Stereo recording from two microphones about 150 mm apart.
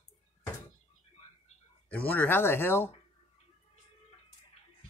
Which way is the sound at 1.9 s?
10° left (ahead or behind).